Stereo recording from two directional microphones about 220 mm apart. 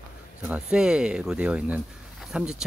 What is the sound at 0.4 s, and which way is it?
Speech, 5° right (ahead or behind).